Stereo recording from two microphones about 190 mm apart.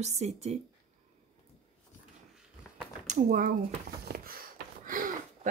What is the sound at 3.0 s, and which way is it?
Speech, 45° right (ahead or behind).